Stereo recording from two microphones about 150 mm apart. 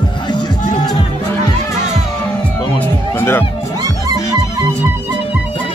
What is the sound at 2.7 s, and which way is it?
Music, 15° left (ahead or behind).